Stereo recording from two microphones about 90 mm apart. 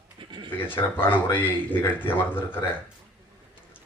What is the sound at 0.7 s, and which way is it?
Speech, 20° left (ahead or behind).